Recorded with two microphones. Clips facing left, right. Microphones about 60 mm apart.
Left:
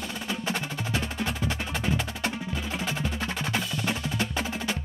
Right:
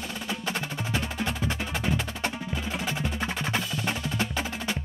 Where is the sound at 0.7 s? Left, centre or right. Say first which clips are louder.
Even; centre.